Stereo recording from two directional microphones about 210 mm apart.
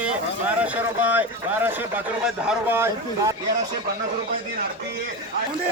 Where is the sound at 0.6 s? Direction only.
5° right (ahead or behind).